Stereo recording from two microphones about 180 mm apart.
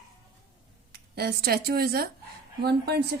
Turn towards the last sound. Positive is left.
turn(degrees=-60)  # may be behind; listen again after turning